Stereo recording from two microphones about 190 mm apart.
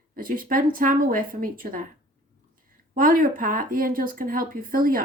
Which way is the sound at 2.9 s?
45° right (ahead or behind).